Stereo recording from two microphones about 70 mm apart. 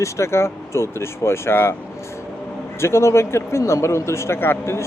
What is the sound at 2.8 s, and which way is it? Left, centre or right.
Speech, left.